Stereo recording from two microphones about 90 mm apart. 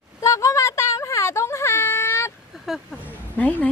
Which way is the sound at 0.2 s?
35° left (ahead or behind).